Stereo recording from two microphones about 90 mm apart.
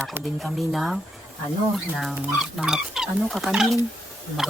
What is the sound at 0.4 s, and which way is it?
Speech, centre (ahead or behind).